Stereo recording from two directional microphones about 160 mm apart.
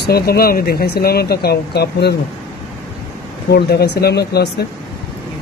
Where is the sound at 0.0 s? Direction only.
80° left.